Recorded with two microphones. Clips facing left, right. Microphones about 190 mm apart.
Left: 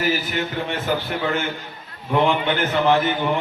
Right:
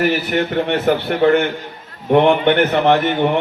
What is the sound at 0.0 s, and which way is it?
A man's voice, 60° right (ahead or behind).